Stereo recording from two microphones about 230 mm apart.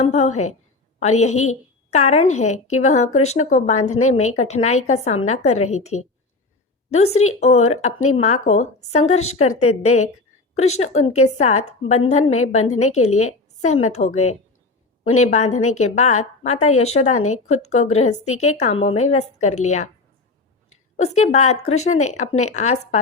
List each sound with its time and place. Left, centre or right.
0.0 s a woman's voice: left
20.9 s a woman's voice: left